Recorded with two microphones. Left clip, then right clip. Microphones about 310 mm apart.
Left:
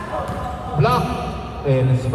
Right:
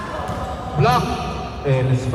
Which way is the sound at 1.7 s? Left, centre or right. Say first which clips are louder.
Left 1 dB; right.